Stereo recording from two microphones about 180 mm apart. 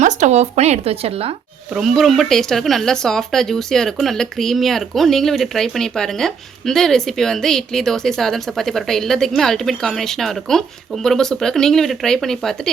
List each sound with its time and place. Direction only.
0.0 s speech: 40° right (ahead or behind)
1.7 s speech: centre (ahead or behind)